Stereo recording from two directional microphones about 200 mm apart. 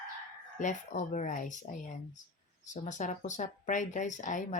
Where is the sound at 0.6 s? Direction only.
40° left (ahead or behind).